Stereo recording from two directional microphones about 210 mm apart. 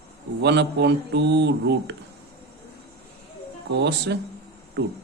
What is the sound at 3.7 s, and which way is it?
Speech, 55° right (ahead or behind).